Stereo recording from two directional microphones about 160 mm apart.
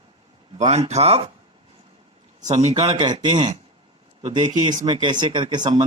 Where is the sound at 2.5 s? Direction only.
40° right (ahead or behind).